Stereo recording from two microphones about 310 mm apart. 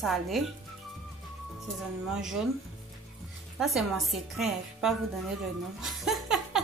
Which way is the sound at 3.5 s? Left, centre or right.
Centre.